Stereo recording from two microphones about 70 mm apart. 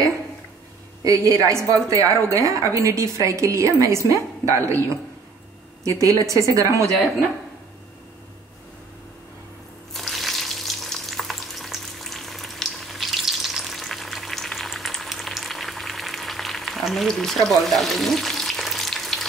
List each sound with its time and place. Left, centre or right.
1.0 s a woman's voice: right
5.9 s a woman's voice: right
9.9 s frying: centre